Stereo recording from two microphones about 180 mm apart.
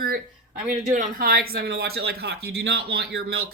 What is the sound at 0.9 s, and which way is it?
Speech, 50° right (ahead or behind).